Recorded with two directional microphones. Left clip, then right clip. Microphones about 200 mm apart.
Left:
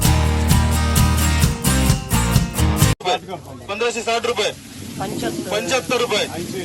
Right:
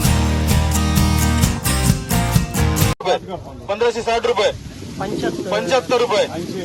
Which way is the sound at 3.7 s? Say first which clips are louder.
Right 2 dB; 5° left (ahead or behind).